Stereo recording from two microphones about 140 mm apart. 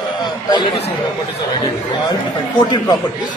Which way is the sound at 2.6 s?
30° left (ahead or behind).